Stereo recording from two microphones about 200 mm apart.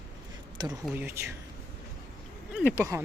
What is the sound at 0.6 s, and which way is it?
Speech, 20° right (ahead or behind).